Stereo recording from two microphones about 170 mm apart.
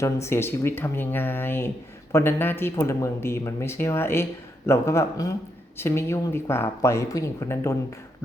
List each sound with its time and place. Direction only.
0.0 s speech: 15° left (ahead or behind)